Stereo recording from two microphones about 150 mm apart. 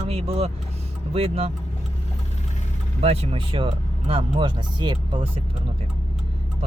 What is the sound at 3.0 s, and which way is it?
Speech, 40° right (ahead or behind).